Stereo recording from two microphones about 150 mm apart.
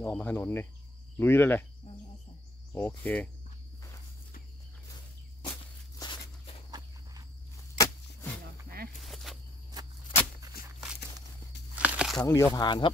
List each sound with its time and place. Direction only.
0.0 s speech: 10° left (ahead or behind)
3.0 s speech: 10° left (ahead or behind)
6.0 s walk: 25° left (ahead or behind)
7.7 s a sound: 20° left (ahead or behind)
8.6 s snake: 75° right (ahead or behind)
9.0 s a sound: centre (ahead or behind)
11.7 s a sound: 5° right (ahead or behind)
12.2 s speech: 20° left (ahead or behind)
12.5 s speech: 30° left (ahead or behind)